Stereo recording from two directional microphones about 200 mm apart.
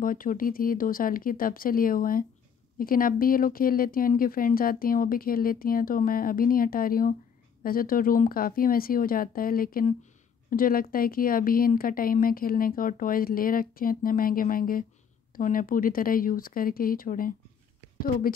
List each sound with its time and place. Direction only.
0.0 s a woman's voice: 45° left (ahead or behind)